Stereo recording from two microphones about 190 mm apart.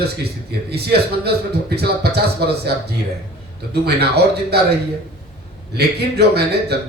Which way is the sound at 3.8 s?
60° right (ahead or behind).